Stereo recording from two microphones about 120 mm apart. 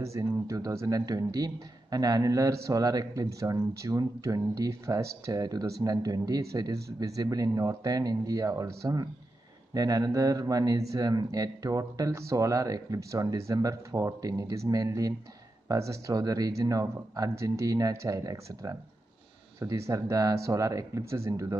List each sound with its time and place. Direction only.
0.0 s a man's voice: 25° right (ahead or behind)